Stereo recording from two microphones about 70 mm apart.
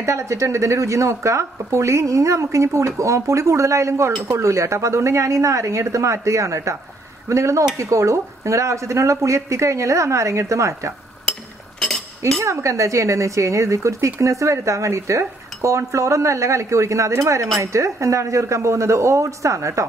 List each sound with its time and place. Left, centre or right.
0.0 s speech: right
12.4 s speech: right